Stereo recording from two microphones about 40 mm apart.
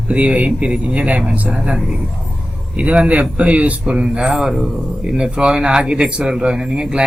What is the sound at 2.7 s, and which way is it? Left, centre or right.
Speech, right.